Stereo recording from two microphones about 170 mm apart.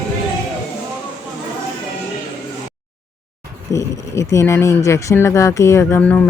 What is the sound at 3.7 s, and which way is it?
Speech, 15° left (ahead or behind).